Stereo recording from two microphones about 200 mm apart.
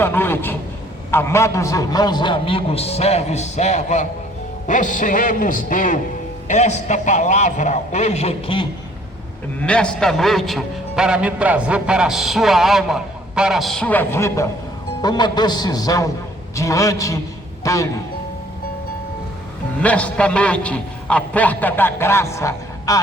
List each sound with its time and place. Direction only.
0.0 s a man's voice: 10° left (ahead or behind); by 8.6 s 30° left (ahead or behind)
9.6 s a man's voice: 5° left (ahead or behind)
19.8 s a man's voice: 5° left (ahead or behind)